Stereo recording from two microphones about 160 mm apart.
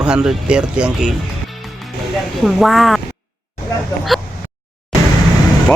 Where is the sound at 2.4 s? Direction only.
Centre (ahead or behind).